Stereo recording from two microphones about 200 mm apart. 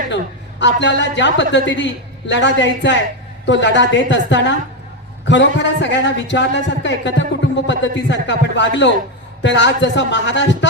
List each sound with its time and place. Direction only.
0.6 s a man's voice: 65° left (ahead or behind)